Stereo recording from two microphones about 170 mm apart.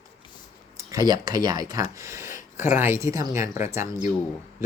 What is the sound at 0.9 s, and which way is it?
Speech, 20° right (ahead or behind).